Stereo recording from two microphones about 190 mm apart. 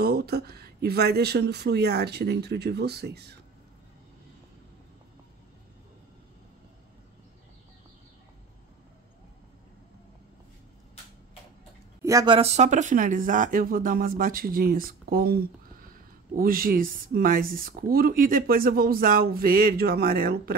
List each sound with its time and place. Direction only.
0.0 s speech: 55° right (ahead or behind)
12.0 s a woman's voice: 15° right (ahead or behind)
12.4 s speech: 35° right (ahead or behind); by 20.5 s 50° right (ahead or behind)